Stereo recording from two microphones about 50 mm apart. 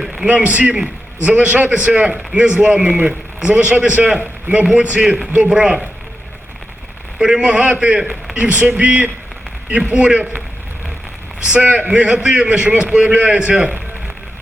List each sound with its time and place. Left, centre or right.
0.3 s a man's voice: right
7.2 s a man's voice: centre
11.6 s a man's voice: right